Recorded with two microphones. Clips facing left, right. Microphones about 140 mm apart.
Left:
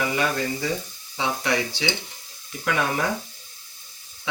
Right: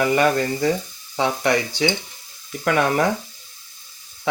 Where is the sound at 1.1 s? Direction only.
50° right (ahead or behind).